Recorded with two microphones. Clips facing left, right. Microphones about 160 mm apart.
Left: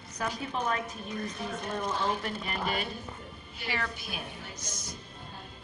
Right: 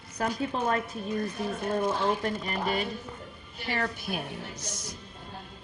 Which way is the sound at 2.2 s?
35° right (ahead or behind).